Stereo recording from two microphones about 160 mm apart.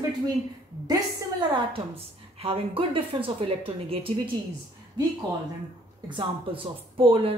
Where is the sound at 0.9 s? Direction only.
25° right (ahead or behind).